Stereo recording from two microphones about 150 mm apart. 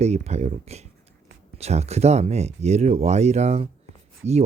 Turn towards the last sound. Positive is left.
turn(degrees=-45)  # may be behind; listen again after turning